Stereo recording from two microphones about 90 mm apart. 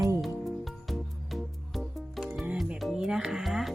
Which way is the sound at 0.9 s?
Centre (ahead or behind).